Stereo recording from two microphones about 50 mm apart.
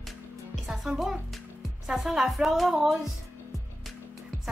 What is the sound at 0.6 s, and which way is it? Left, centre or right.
Speech, centre.